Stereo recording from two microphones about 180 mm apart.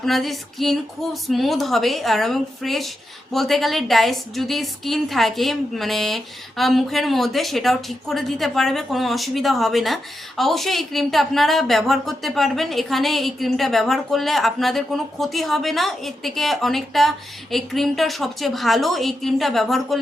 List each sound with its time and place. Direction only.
0.0 s a woman's voice: centre (ahead or behind)